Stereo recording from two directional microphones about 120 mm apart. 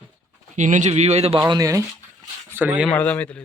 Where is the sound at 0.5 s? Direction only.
85° right; by 1.3 s 65° right (ahead or behind).